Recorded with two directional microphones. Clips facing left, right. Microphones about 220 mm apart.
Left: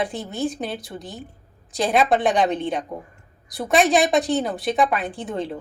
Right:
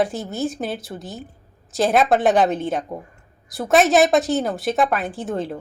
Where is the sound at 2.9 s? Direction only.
25° right (ahead or behind).